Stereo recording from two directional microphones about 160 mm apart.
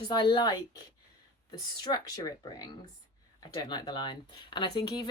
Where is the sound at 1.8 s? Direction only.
25° left (ahead or behind).